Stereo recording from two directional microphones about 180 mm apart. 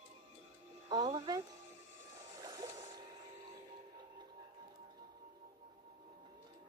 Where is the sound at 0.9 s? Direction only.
20° right (ahead or behind).